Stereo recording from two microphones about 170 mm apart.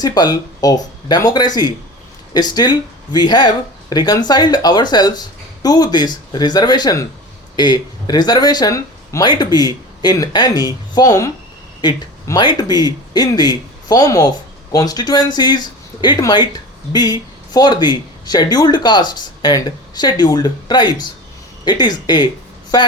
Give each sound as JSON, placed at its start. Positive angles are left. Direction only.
{"t": 0.0, "sound": "speech", "side_deg": 25}